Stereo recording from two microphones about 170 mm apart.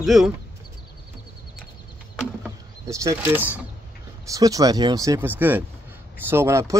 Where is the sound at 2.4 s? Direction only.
20° right (ahead or behind).